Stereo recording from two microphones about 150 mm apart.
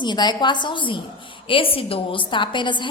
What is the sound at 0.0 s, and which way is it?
A woman's voice, 30° left (ahead or behind).